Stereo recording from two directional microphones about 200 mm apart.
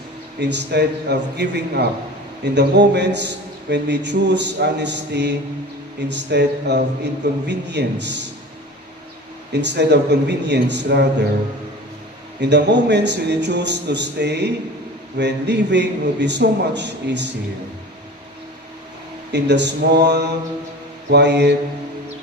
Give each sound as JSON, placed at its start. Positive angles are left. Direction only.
{"t": 0.3, "sound": "a man's voice", "side_deg": -60}
{"t": 9.5, "sound": "a man's voice", "side_deg": -60}
{"t": 12.4, "sound": "a man's voice", "side_deg": -60}
{"t": 19.3, "sound": "a man's voice", "side_deg": -60}